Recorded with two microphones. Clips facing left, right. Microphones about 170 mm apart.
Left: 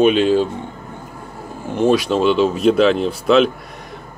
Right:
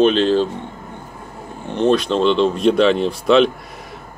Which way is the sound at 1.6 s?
5° left (ahead or behind).